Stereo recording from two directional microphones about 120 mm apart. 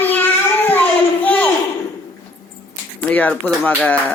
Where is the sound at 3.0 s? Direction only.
15° left (ahead or behind).